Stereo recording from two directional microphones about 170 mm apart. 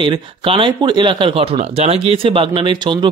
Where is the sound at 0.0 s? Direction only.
30° right (ahead or behind).